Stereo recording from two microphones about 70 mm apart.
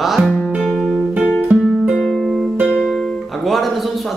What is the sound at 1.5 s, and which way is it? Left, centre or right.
Music, centre.